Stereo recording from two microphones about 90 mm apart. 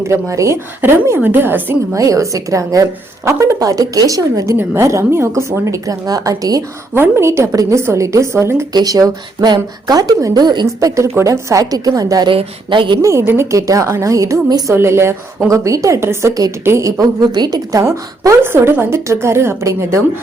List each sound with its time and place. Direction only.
0.0 s a woman's voice: 35° right (ahead or behind)
2.0 s a woman's voice: 35° right (ahead or behind)
6.9 s a woman's voice: 25° right (ahead or behind)
8.7 s speech: 45° right (ahead or behind)
10.8 s a woman's voice: 35° right (ahead or behind)
12.3 s speech: 75° right (ahead or behind)
13.0 s a woman's voice: 30° right (ahead or behind)